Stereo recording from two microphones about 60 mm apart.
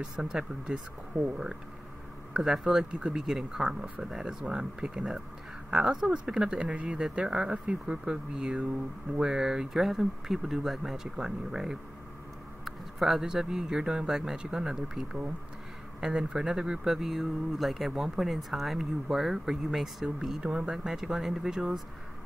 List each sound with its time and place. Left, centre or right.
0.0 s speech: centre
2.3 s speech: centre